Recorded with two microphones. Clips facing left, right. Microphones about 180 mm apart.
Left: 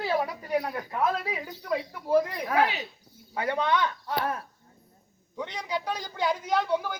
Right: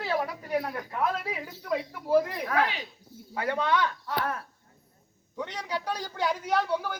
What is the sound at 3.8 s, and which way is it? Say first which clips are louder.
Speech: left 1 dB; 25° left (ahead or behind).